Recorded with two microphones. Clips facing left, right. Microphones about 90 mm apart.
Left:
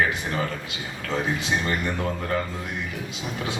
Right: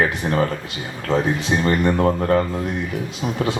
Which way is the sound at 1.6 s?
45° right (ahead or behind).